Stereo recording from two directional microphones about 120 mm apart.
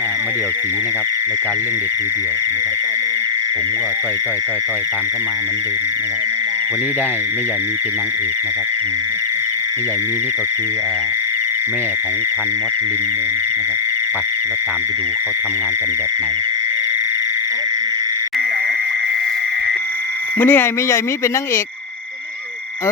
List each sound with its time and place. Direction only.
20.4 s speech: 15° left (ahead or behind)